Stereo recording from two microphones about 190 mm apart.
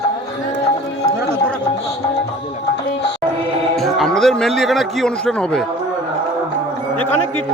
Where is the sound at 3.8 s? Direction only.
Centre (ahead or behind).